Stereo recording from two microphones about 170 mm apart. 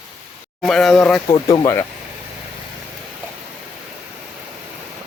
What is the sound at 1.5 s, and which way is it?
Speech, 20° left (ahead or behind).